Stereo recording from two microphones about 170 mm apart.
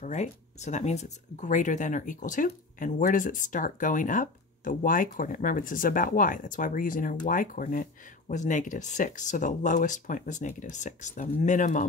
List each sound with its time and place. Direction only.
0.0 s speech: 45° left (ahead or behind)